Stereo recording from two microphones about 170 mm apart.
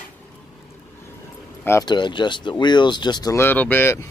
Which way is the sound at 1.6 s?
15° left (ahead or behind).